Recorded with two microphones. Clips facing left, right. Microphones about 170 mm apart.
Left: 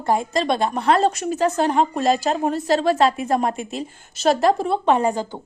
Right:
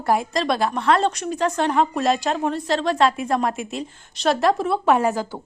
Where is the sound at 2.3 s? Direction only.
35° left (ahead or behind).